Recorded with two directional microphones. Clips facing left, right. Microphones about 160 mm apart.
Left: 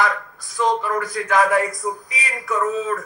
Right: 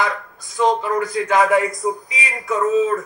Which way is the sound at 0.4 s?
20° right (ahead or behind).